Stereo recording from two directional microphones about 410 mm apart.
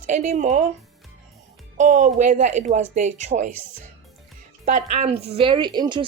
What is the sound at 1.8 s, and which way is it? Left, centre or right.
A woman's voice, centre.